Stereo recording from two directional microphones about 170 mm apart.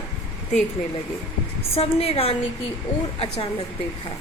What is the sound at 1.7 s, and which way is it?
A woman's voice, 35° left (ahead or behind).